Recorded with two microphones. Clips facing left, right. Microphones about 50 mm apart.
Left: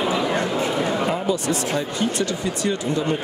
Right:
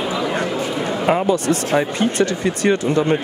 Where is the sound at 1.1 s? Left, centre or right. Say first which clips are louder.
Right 6 dB; right.